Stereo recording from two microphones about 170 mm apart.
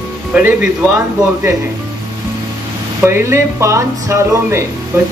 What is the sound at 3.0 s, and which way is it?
Speech, 15° right (ahead or behind).